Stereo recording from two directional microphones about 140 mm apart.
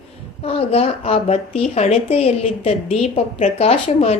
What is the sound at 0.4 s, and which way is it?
A woman's voice, 45° left (ahead or behind).